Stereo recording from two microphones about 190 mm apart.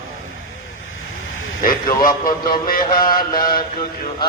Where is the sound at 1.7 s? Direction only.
45° left (ahead or behind).